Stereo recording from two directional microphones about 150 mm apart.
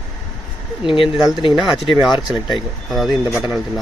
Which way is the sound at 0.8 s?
35° left (ahead or behind).